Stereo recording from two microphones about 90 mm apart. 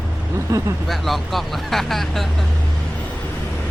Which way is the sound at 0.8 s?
Centre (ahead or behind).